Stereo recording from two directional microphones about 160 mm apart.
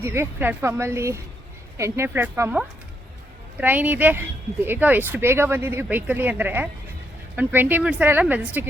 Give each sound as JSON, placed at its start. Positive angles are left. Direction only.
{"t": 0.0, "sound": "speech", "side_deg": -15}
{"t": 3.6, "sound": "speech", "side_deg": -10}